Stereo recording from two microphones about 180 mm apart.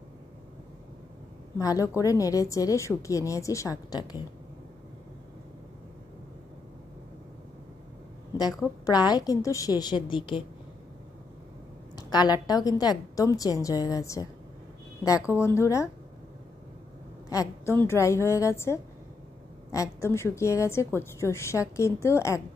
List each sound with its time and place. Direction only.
1.6 s a woman's voice: 20° left (ahead or behind)
8.8 s a woman's voice: 20° left (ahead or behind)
12.1 s a woman's voice: 25° left (ahead or behind)
15.3 s a woman's voice: 15° left (ahead or behind)
17.3 s a woman's voice: 20° left (ahead or behind)